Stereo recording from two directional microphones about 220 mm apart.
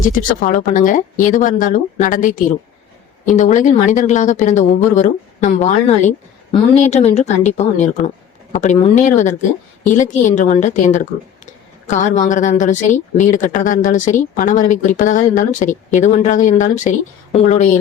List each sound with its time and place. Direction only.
0.0 s a woman's voice: 35° left (ahead or behind)